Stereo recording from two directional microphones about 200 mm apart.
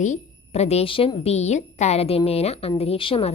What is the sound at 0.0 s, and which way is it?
A woman's voice, 35° left (ahead or behind).